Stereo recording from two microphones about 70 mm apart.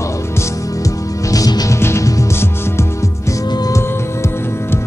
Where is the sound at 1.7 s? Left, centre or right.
Left.